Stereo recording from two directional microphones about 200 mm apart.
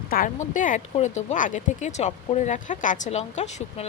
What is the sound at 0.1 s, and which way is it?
A woman's voice, 45° left (ahead or behind).